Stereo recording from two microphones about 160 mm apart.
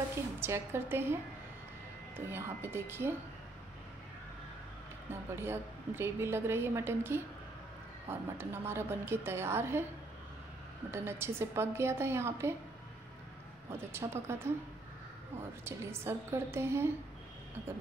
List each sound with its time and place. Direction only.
0.4 s a woman's voice: 15° right (ahead or behind)
2.3 s a woman's voice: 15° right (ahead or behind)
5.3 s a woman's voice: 15° right (ahead or behind)
10.9 s a woman's voice: 15° right (ahead or behind)
13.7 s a woman's voice: 15° right (ahead or behind)
15.6 s a woman's voice: 15° right (ahead or behind)